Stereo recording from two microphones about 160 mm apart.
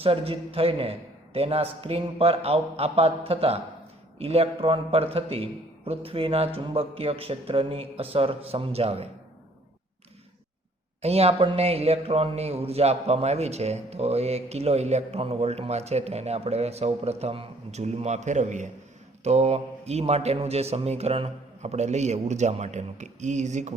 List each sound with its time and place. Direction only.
0.0 s a man's voice: 35° right (ahead or behind)
11.0 s a man's voice: 40° right (ahead or behind)